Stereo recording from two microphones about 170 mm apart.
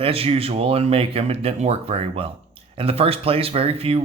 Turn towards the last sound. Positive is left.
turn(degrees=-35)  # may be behind; listen again after turning